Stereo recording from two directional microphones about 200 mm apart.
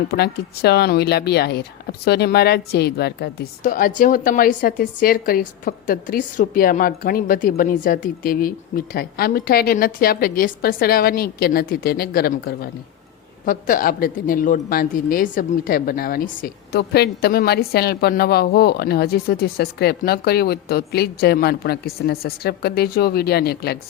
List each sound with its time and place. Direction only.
0.1 s speech: 50° left (ahead or behind)